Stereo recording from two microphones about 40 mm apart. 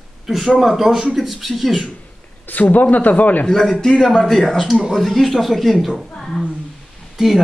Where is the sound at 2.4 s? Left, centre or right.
Left.